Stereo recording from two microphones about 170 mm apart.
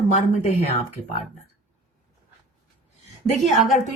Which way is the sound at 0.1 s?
45° left (ahead or behind).